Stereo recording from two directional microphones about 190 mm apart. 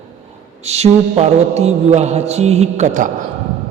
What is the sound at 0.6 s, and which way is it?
Mantra, 35° right (ahead or behind).